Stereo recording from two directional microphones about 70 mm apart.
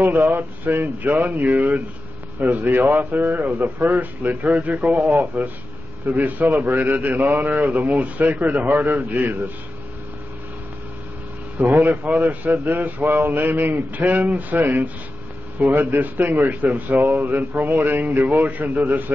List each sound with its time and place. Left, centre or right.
0.4 s a man's voice: right
11.5 s a man's voice: right